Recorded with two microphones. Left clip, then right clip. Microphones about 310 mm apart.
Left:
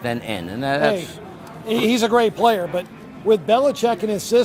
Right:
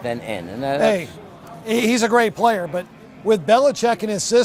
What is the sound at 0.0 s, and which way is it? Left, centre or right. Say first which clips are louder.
Speech: even; left.